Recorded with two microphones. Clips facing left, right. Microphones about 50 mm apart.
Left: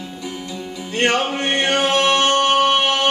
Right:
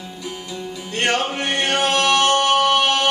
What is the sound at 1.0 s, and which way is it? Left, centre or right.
Music, left.